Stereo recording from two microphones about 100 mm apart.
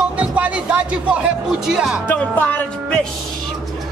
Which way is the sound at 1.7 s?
5° right (ahead or behind).